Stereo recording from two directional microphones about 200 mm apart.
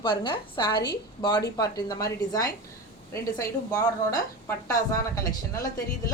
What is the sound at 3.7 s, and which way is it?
A woman's voice, 15° left (ahead or behind).